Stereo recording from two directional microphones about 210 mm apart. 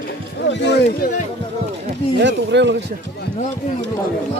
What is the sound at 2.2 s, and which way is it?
Speech, 55° right (ahead or behind).